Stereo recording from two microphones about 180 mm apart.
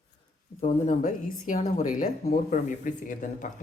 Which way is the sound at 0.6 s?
45° left (ahead or behind).